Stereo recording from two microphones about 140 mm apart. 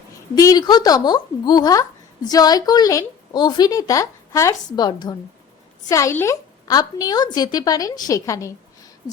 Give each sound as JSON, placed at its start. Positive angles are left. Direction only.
{"t": 0.3, "sound": "a woman's voice", "side_deg": 25}